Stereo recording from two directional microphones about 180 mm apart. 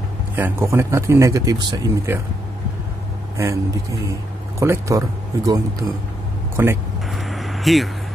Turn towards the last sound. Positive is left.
turn(degrees=0)  # may be behind; listen again after turning